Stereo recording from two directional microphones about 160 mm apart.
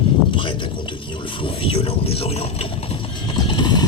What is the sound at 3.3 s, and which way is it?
Mechanisms, 30° left (ahead or behind).